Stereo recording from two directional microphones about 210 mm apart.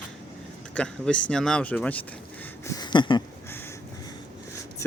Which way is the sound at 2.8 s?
20° left (ahead or behind).